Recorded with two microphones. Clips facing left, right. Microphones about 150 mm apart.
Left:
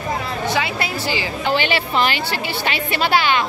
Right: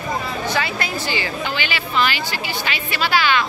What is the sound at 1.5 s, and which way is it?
Speech, 25° left (ahead or behind).